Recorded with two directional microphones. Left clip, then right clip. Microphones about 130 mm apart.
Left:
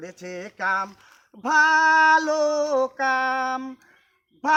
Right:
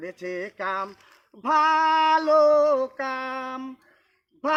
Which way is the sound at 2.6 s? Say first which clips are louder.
Even; 25° left (ahead or behind).